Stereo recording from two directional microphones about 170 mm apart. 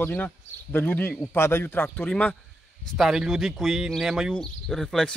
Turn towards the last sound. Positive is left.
turn(degrees=0)  # may be behind; listen again after turning